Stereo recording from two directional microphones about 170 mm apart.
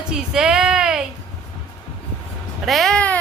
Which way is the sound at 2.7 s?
Centre (ahead or behind).